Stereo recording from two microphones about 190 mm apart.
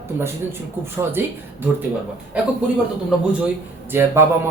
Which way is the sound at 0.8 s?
10° right (ahead or behind).